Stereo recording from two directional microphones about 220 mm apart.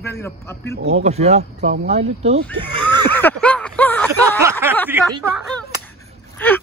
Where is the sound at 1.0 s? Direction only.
30° right (ahead or behind).